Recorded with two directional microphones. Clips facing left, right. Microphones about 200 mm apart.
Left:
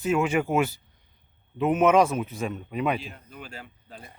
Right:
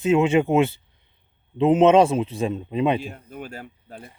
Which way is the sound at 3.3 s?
50° right (ahead or behind).